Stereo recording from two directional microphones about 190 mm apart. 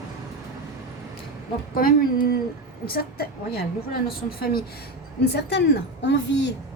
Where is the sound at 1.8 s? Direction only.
50° left (ahead or behind).